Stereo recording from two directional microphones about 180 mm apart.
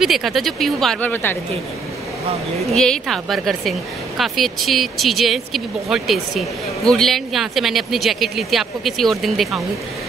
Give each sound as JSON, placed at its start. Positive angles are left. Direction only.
{"t": 0.0, "sound": "speech", "side_deg": 0}
{"t": 2.7, "sound": "speech", "side_deg": 0}